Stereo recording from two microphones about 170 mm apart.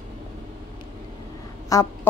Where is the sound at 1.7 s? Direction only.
15° left (ahead or behind).